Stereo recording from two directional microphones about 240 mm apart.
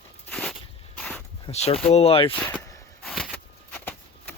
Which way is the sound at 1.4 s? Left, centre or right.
Left.